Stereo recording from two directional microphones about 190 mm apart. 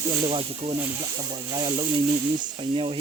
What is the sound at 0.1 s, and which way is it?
Speech, 25° right (ahead or behind).